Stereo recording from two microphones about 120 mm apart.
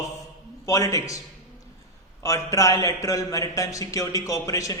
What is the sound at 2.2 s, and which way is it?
A man's voice, 25° left (ahead or behind).